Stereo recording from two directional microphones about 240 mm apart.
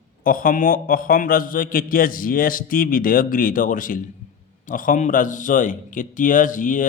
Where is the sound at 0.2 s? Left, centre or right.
Left.